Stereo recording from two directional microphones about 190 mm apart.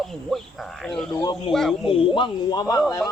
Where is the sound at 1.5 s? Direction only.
Centre (ahead or behind).